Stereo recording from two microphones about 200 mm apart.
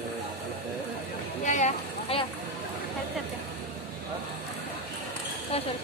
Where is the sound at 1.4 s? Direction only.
35° left (ahead or behind).